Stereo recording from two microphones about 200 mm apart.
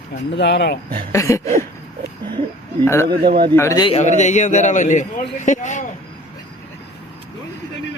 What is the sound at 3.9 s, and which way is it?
A man's voice, 35° left (ahead or behind).